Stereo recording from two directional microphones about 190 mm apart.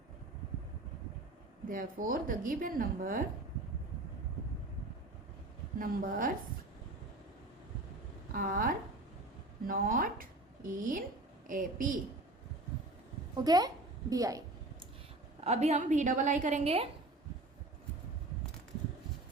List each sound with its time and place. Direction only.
1.6 s a woman's voice: 45° right (ahead or behind)
5.8 s a woman's voice: 45° right (ahead or behind)
8.3 s a woman's voice: 50° right (ahead or behind)
13.3 s a woman's voice: 20° right (ahead or behind)
15.4 s a woman's voice: 35° right (ahead or behind)